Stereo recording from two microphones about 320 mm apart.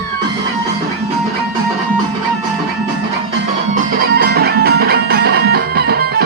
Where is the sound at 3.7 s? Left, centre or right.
Right.